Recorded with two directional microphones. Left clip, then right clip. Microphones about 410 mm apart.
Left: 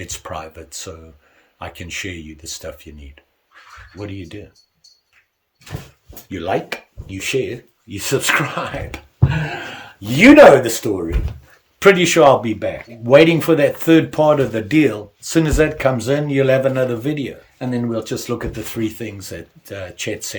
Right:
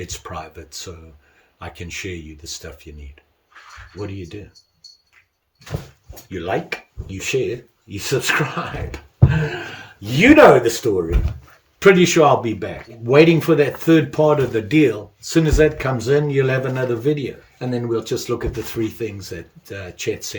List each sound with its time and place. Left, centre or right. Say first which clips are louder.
0.0 s speech: left 2 dB; centre
4.0 s speech: even; centre
6.2 s speech: left 2 dB; centre